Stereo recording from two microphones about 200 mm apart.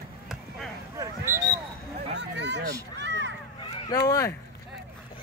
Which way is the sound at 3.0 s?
60° right (ahead or behind).